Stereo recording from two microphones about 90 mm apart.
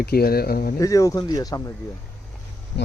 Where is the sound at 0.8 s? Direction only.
35° left (ahead or behind).